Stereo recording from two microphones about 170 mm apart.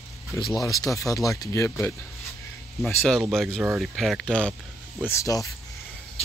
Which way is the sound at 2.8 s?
Centre (ahead or behind).